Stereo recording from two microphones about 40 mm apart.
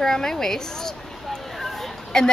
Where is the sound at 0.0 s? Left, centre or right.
Centre.